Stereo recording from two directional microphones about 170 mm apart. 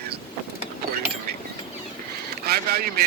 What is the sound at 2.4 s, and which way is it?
Speech, 65° right (ahead or behind).